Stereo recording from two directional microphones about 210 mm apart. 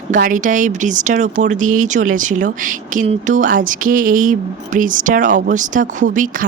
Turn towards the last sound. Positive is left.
turn(degrees=-40)  # may be behind; listen again after turning